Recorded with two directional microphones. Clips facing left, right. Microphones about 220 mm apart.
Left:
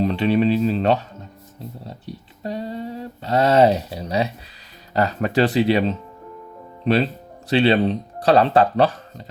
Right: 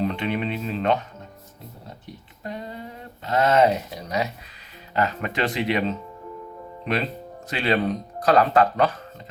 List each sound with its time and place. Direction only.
0.0 s speech: 35° left (ahead or behind)
6.9 s speech: 30° left (ahead or behind)